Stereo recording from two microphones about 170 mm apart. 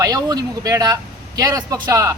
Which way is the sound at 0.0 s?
20° right (ahead or behind).